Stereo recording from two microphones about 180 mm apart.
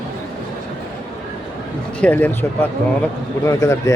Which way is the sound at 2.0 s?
10° left (ahead or behind).